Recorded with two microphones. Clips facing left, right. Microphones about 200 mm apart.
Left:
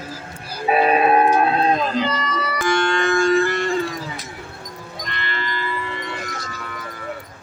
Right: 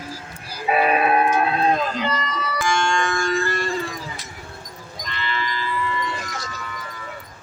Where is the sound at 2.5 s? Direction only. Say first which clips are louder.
Left 2 dB; 60° left (ahead or behind).